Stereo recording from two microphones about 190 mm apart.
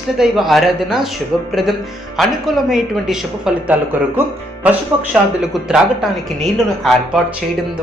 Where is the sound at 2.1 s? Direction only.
Centre (ahead or behind).